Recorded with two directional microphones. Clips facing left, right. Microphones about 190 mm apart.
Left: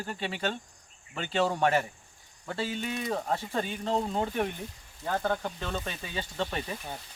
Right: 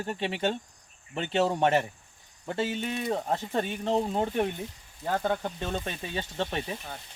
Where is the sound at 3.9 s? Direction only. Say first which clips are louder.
Right 2 dB; 25° right (ahead or behind).